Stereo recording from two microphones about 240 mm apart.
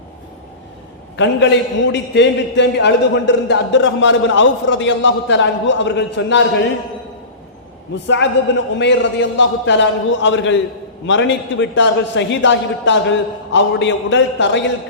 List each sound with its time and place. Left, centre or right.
1.1 s a man's voice: left
8.0 s a man's voice: left